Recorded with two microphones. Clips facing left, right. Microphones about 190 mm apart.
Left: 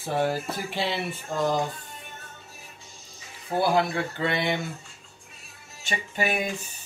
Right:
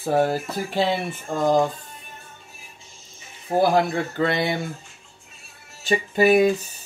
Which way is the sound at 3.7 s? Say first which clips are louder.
Right 3 dB; 40° right (ahead or behind).